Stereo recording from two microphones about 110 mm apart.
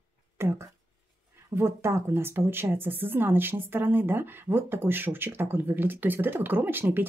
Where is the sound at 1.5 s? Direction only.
25° right (ahead or behind).